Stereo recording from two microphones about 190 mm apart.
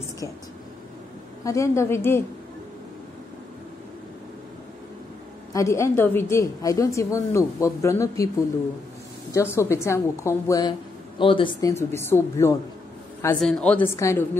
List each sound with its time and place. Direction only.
1.4 s a woman's voice: 15° left (ahead or behind)
5.5 s a woman's voice: 15° left (ahead or behind)
9.3 s a woman's voice: 15° left (ahead or behind)
11.1 s speech: 25° left (ahead or behind)
11.7 s a woman's voice: 10° left (ahead or behind)